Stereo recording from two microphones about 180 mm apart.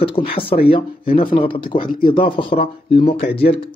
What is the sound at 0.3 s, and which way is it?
Speech, 30° left (ahead or behind).